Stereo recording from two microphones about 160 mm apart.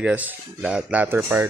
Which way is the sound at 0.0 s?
10° right (ahead or behind).